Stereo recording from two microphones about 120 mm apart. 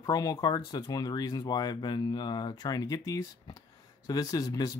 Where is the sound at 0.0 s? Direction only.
30° left (ahead or behind).